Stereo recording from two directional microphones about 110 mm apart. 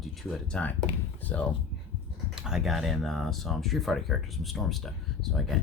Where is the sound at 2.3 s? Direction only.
5° right (ahead or behind).